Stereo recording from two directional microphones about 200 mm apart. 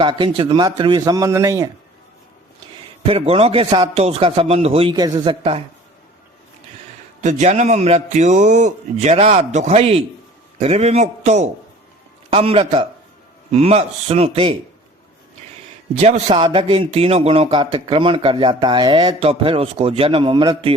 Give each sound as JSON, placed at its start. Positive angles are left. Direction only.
{"t": 0.0, "sound": "speech", "side_deg": -25}
{"t": 3.1, "sound": "speech", "side_deg": -30}
{"t": 7.2, "sound": "a man's voice", "side_deg": -35}
{"t": 16.0, "sound": "a man's voice", "side_deg": -35}